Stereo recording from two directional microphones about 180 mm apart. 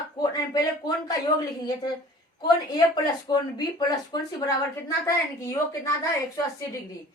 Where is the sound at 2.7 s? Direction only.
25° left (ahead or behind).